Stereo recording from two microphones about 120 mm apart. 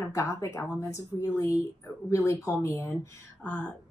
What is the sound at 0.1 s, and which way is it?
A woman's voice, 25° left (ahead or behind).